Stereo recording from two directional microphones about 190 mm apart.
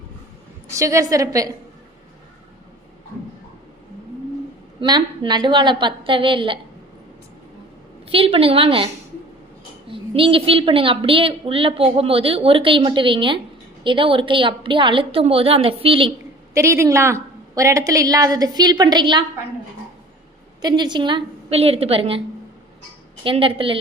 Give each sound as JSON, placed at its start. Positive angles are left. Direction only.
{"t": 0.7, "sound": "a woman's voice", "side_deg": -15}
{"t": 4.8, "sound": "a woman's voice", "side_deg": -25}
{"t": 8.1, "sound": "a woman's voice", "side_deg": -30}
{"t": 9.9, "sound": "a woman's voice", "side_deg": -30}
{"t": 16.6, "sound": "a woman's voice", "side_deg": -15}
{"t": 20.6, "sound": "a woman's voice", "side_deg": -20}
{"t": 23.2, "sound": "a woman's voice", "side_deg": -25}